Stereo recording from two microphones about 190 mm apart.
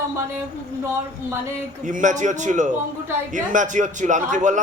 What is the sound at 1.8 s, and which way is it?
A man's voice, 40° right (ahead or behind).